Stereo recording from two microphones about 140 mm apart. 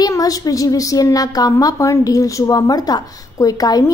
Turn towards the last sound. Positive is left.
turn(degrees=25)  # may be behind; listen again after turning